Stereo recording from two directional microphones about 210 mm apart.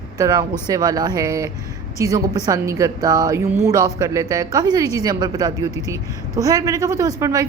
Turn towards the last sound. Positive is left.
turn(degrees=-15)  # may be behind; listen again after turning